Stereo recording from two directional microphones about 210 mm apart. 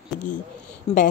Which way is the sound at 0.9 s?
25° left (ahead or behind).